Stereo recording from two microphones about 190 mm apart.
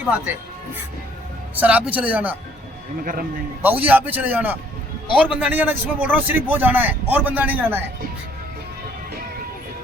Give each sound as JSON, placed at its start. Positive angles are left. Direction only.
{"t": 1.5, "sound": "a man's voice", "side_deg": -10}
{"t": 3.0, "sound": "a man's voice", "side_deg": -50}
{"t": 3.6, "sound": "a man's voice", "side_deg": -10}